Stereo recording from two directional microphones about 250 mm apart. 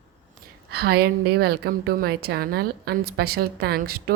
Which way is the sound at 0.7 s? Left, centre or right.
Right.